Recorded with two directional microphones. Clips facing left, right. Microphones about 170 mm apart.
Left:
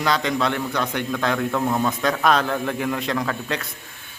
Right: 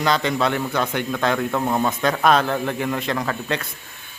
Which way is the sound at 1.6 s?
20° right (ahead or behind).